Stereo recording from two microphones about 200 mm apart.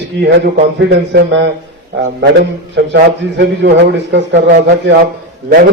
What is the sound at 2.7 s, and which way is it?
A man's voice, 60° right (ahead or behind).